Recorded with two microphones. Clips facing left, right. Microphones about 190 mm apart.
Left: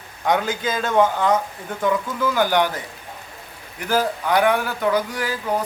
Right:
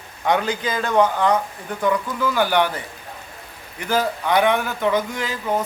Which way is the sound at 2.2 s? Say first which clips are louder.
Even; 15° left (ahead or behind).